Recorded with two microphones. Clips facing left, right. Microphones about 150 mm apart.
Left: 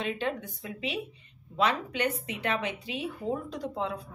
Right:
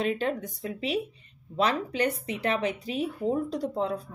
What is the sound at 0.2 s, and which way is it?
A woman's voice, 40° right (ahead or behind).